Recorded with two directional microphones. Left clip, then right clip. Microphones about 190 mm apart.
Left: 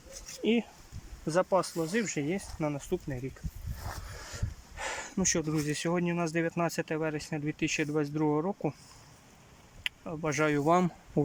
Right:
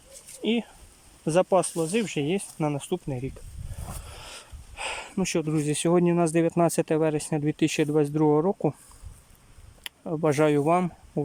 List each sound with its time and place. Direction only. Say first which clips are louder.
0.4 s speech: right 2 dB; centre (ahead or behind)
1.2 s speech: right 6 dB; 15° right (ahead or behind)
3.8 s speech: right 1 dB; 5° right (ahead or behind)
9.8 s speech: right 8 dB; 30° right (ahead or behind)
10.7 s speech: right 3 dB; centre (ahead or behind)